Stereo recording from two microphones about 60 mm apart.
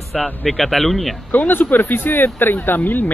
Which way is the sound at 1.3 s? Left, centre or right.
Left.